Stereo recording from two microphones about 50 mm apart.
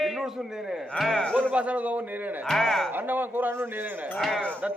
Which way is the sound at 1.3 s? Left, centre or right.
Right.